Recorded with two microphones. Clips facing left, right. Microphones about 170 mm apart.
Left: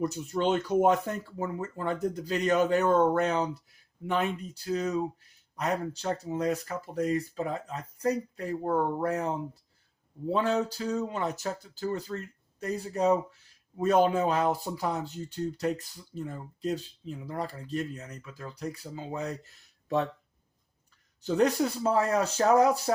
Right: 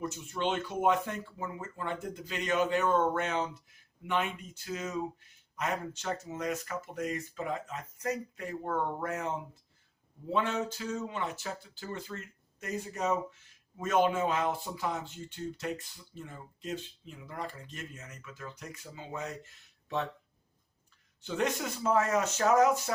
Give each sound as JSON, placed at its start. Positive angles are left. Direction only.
{"t": 0.0, "sound": "speech", "side_deg": 40}
{"t": 21.2, "sound": "speech", "side_deg": 40}